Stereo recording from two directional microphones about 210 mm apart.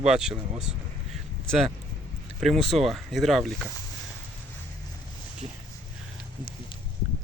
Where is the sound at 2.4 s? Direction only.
Centre (ahead or behind).